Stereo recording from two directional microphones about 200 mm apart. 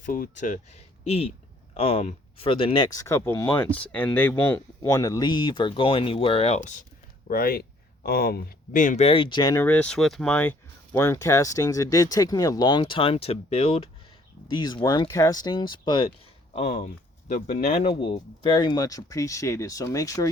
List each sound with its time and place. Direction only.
0.0 s speech: 40° left (ahead or behind)
7.3 s speech: 50° left (ahead or behind)
18.0 s speech: 25° left (ahead or behind)